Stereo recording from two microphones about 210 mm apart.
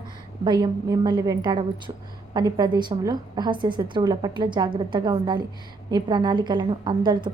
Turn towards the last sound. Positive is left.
turn(degrees=-20)  # may be behind; listen again after turning